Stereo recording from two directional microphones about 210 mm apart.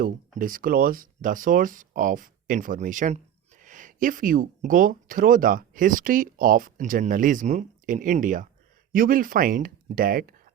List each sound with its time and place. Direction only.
0.0 s speech: 40° right (ahead or behind)